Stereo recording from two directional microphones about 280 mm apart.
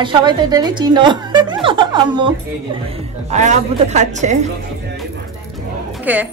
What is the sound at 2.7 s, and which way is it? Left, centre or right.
A woman's voice, right.